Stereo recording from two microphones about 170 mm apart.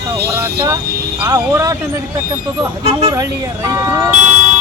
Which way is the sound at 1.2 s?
15° right (ahead or behind).